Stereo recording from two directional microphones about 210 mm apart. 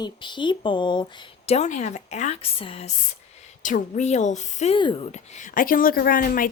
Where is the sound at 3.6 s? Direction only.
40° left (ahead or behind).